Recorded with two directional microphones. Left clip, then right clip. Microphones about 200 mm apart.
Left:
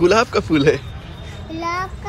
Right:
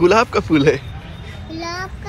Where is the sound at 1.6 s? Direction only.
15° left (ahead or behind).